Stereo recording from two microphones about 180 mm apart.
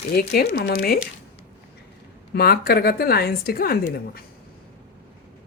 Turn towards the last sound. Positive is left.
turn(degrees=55)  # may be behind; listen again after turning